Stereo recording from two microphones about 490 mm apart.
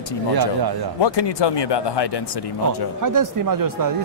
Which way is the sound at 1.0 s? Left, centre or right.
Left.